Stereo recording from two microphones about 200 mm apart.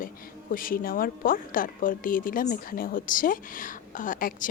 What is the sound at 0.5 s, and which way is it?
A woman's voice, 45° left (ahead or behind).